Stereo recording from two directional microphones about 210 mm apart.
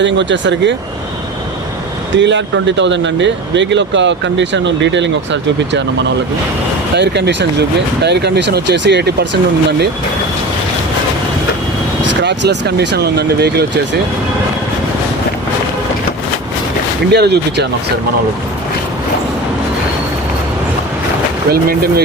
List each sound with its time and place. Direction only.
0.0 s speech: 60° right (ahead or behind)
2.1 s speech: 60° right (ahead or behind)
6.9 s speech: 55° right (ahead or behind)
12.0 s speech: 55° right (ahead or behind)
17.1 s speech: 50° right (ahead or behind)
21.5 s speech: 45° right (ahead or behind)